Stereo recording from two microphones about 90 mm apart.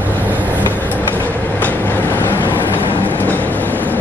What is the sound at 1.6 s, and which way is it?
Train, 20° left (ahead or behind).